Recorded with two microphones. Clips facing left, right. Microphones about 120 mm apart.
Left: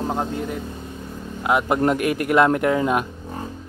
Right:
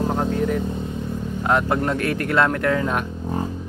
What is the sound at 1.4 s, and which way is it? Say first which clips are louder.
Speech: left 2 dB; 10° left (ahead or behind).